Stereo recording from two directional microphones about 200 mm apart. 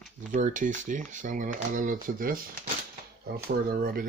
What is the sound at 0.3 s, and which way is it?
Speech, 40° right (ahead or behind).